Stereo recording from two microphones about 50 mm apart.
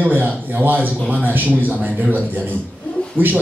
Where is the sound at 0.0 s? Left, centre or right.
Right.